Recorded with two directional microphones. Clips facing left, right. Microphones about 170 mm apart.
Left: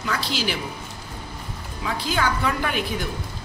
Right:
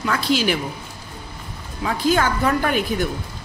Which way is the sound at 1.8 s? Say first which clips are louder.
Right 6 dB; 50° right (ahead or behind).